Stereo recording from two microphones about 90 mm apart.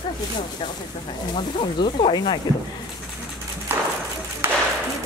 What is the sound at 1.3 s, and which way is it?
Speech, 65° left (ahead or behind).